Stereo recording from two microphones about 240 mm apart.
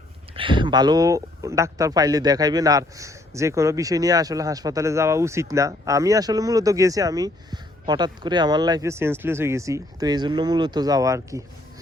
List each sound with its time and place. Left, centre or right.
0.3 s a man's voice: right